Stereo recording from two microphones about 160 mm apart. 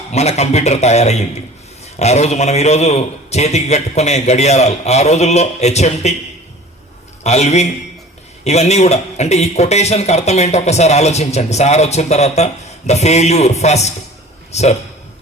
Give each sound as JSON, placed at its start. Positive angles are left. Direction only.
{"t": 0.1, "sound": "a man's voice", "side_deg": 45}
{"t": 7.3, "sound": "a man's voice", "side_deg": 45}